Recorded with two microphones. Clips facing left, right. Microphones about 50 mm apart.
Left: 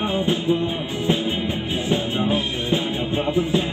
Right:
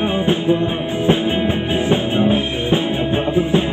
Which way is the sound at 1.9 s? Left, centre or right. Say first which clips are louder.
Right 5 dB; right.